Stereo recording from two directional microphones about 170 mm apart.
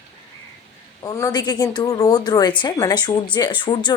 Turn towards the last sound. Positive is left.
turn(degrees=25)  # may be behind; listen again after turning